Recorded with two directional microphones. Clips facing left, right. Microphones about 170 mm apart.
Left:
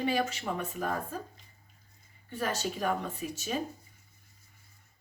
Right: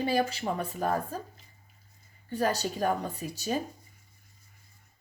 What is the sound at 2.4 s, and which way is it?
Speech, 40° right (ahead or behind).